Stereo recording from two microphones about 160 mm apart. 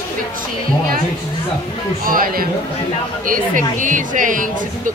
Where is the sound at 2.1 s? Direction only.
60° right (ahead or behind).